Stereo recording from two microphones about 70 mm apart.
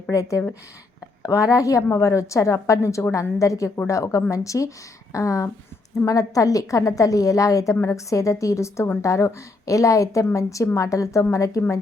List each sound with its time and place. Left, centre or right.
0.1 s a woman's voice: left